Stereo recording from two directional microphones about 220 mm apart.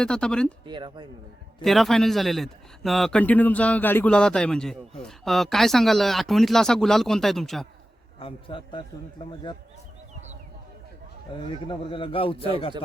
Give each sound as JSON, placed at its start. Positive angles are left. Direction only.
{"t": 0.0, "sound": "speech", "side_deg": 5}
{"t": 0.6, "sound": "speech", "side_deg": -20}
{"t": 1.6, "sound": "speech", "side_deg": 0}
{"t": 8.2, "sound": "a man's voice", "side_deg": 20}
{"t": 11.3, "sound": "a man's voice", "side_deg": 25}